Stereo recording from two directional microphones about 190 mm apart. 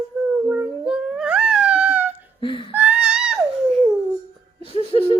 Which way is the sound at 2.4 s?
25° left (ahead or behind).